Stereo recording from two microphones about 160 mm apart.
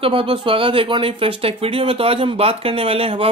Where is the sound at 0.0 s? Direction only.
35° right (ahead or behind).